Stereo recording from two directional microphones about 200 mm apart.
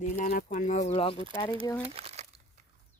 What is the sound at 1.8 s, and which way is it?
Crumpling, 30° right (ahead or behind).